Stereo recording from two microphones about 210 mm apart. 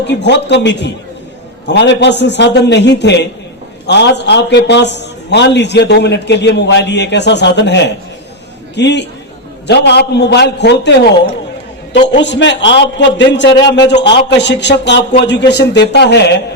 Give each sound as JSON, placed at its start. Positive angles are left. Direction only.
{"t": 0.0, "sound": "a man's voice", "side_deg": 55}
{"t": 12.0, "sound": "a man's voice", "side_deg": 60}